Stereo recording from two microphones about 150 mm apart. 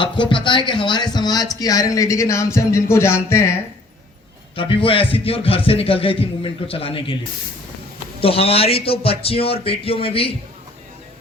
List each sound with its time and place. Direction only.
0.0 s speech: 35° left (ahead or behind); by 3.5 s 15° left (ahead or behind)
4.5 s a man's voice: 35° left (ahead or behind)
8.2 s a man's voice: 40° left (ahead or behind)